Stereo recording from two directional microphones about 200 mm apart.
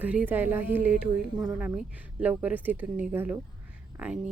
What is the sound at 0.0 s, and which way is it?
A woman's voice, 5° right (ahead or behind).